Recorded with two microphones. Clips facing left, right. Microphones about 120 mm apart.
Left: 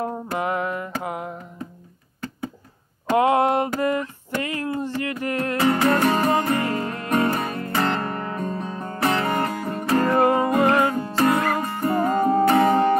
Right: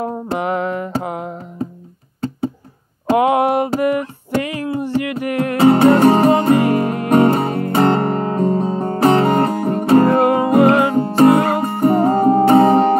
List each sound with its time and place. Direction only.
0.0 s music: 20° right (ahead or behind)
3.2 s a sound: 15° right (ahead or behind)
3.8 s music: 20° right (ahead or behind)